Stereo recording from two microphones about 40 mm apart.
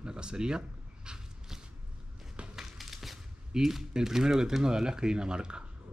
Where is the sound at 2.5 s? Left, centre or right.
Centre.